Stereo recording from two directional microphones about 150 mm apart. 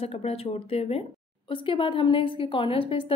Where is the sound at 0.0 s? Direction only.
45° left (ahead or behind).